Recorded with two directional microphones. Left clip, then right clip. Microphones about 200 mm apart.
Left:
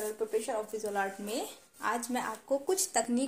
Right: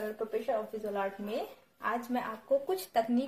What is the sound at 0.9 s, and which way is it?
Speech, 40° left (ahead or behind).